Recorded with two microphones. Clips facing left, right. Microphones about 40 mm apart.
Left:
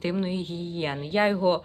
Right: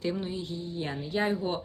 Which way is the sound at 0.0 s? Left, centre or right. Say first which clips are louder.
Left 4 dB; left.